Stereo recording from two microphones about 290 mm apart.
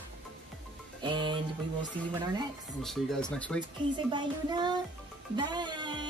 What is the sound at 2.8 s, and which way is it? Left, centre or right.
Speech, centre.